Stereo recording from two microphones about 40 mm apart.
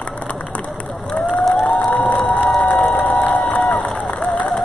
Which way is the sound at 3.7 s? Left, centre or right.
Left.